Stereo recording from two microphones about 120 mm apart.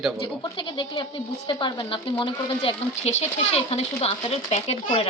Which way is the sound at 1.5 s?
40° left (ahead or behind).